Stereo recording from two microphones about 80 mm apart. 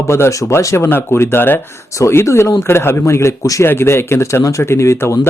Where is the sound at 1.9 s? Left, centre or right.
Left.